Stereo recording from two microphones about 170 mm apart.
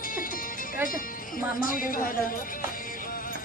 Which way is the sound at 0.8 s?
55° left (ahead or behind).